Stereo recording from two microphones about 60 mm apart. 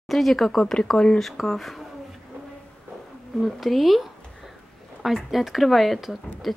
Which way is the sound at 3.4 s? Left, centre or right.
Centre.